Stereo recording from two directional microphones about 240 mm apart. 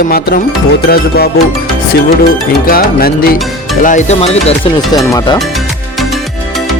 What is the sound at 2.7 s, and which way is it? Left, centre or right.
Speech, left.